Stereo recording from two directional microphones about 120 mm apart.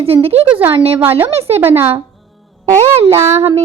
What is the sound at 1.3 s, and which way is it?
Speech, 55° right (ahead or behind).